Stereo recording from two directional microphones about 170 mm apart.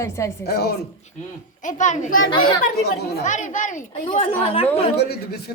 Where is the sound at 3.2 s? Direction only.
45° left (ahead or behind).